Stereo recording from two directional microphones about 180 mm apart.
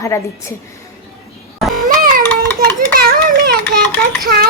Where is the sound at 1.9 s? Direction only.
50° right (ahead or behind).